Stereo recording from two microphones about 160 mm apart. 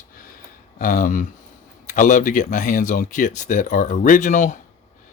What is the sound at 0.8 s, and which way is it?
Speech, 55° left (ahead or behind).